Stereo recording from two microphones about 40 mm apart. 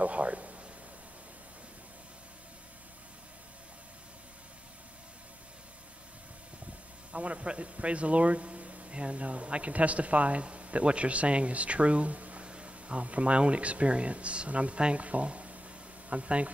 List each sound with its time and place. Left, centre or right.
0.0 s a sound: right
7.1 s speech: right
12.4 s speech: right